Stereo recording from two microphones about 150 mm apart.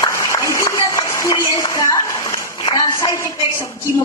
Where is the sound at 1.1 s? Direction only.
20° left (ahead or behind).